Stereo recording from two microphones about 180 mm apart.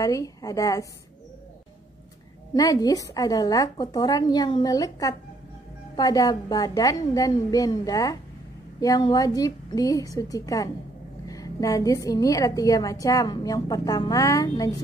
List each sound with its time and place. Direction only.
0.0 s a woman's voice: 20° left (ahead or behind)
2.5 s a woman's voice: 20° left (ahead or behind)